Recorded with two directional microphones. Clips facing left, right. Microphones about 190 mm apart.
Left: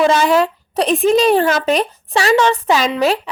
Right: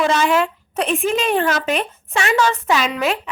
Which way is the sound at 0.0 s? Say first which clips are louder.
Left 4 dB; 35° left (ahead or behind).